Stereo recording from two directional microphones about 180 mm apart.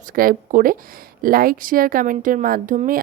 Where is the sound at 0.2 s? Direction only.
50° right (ahead or behind).